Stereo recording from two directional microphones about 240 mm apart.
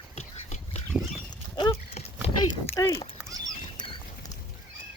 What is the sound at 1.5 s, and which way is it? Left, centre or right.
Clip-clop, centre.